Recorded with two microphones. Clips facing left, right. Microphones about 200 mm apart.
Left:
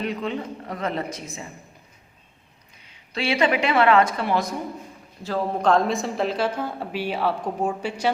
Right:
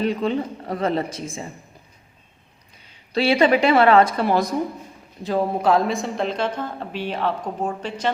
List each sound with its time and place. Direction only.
0.0 s speech: 35° right (ahead or behind)
3.1 s speech: 35° right (ahead or behind)
5.2 s a woman's voice: 15° right (ahead or behind); by 8.1 s 10° left (ahead or behind)